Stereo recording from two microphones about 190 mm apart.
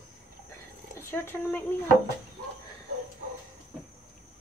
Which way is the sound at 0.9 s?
10° left (ahead or behind).